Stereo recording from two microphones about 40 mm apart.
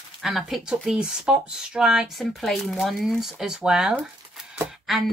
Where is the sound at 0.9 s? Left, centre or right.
Right.